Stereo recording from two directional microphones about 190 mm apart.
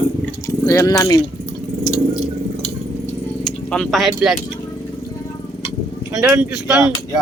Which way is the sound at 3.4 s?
5° left (ahead or behind).